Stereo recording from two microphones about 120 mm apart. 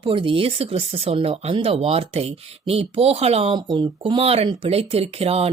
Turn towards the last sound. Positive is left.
turn(degrees=-60)  # may be behind; listen again after turning